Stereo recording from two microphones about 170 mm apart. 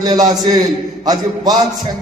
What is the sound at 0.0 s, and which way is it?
A man's voice, 25° right (ahead or behind).